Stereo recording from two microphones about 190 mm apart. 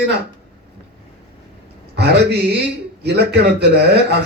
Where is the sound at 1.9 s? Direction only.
60° right (ahead or behind).